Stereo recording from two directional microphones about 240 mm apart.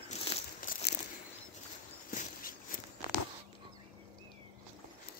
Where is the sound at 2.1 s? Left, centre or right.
Left.